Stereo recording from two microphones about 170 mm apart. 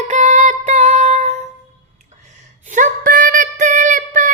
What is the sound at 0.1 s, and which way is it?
Music, 45° right (ahead or behind).